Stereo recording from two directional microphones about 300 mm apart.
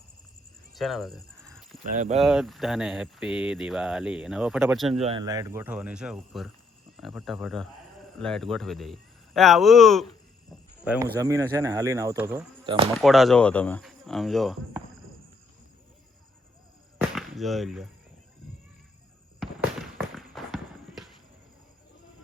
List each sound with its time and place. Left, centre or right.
0.7 s speech: centre
5.0 s speech: centre
12.6 s speech: centre
13.0 s speech: centre
17.0 s chop: centre
19.4 s a sound: centre